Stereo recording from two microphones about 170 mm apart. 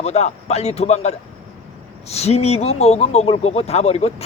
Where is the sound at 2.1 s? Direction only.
40° left (ahead or behind).